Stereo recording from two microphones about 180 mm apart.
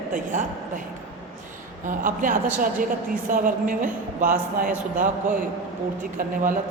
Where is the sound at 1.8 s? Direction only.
50° right (ahead or behind).